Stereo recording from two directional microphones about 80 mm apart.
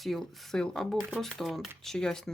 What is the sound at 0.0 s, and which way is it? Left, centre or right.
Speech, centre.